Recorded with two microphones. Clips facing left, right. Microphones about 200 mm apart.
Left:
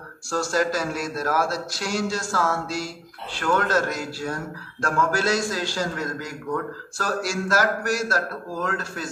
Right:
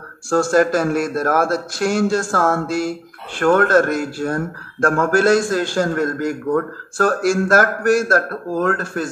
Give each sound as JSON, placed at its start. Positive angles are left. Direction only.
{"t": 0.3, "sound": "a man's voice", "side_deg": -50}